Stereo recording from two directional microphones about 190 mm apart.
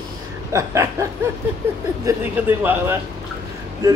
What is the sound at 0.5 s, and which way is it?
Chuckle, 15° right (ahead or behind).